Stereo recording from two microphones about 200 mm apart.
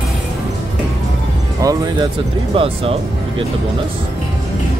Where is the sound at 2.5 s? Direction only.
30° right (ahead or behind).